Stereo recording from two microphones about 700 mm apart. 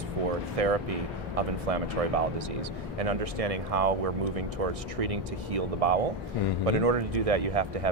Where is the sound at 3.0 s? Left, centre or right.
Right.